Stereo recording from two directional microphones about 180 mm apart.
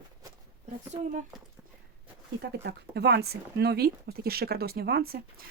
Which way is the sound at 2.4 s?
65° right (ahead or behind).